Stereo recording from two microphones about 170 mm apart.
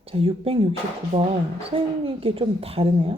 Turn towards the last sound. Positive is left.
turn(degrees=-35)  # may be behind; listen again after turning